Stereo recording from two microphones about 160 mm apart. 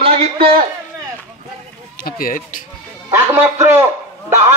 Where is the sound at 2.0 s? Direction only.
65° left (ahead or behind).